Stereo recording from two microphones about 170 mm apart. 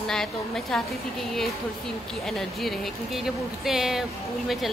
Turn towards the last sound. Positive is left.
turn(degrees=0)  # may be behind; listen again after turning